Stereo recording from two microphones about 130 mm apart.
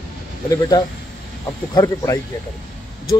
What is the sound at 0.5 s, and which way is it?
Speech, 30° left (ahead or behind).